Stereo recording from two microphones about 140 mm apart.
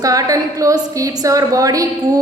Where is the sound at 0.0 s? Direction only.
25° right (ahead or behind).